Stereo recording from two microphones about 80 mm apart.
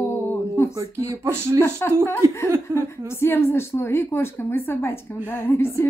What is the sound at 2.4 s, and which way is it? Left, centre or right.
Speech, right.